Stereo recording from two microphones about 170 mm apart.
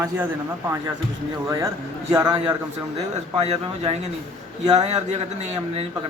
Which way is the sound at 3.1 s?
40° right (ahead or behind).